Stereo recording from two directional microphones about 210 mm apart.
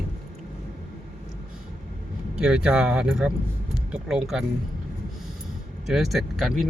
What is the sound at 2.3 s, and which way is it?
Speech, 5° right (ahead or behind).